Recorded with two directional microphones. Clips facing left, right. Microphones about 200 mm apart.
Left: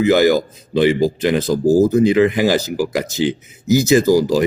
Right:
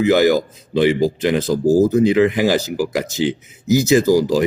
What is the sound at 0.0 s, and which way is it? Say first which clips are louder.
Speech: left 1 dB; 35° left (ahead or behind).